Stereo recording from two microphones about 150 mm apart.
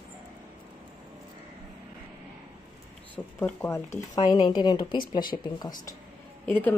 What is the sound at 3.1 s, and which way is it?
A woman's voice, 15° left (ahead or behind).